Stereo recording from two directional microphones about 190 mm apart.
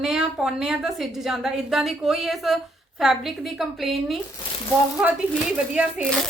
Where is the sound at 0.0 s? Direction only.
5° right (ahead or behind).